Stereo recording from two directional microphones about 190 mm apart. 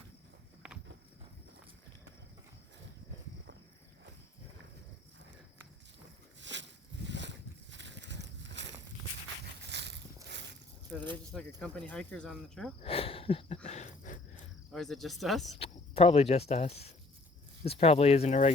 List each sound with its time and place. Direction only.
6.4 s a sound: 70° right (ahead or behind)
11.0 s speech: 25° right (ahead or behind)
11.3 s cricket: 5° left (ahead or behind)
12.8 s a sound: 30° left (ahead or behind)
14.7 s cricket: centre (ahead or behind)
15.5 s speech: 30° left (ahead or behind)